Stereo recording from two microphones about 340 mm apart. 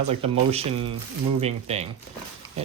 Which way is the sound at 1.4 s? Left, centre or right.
Centre.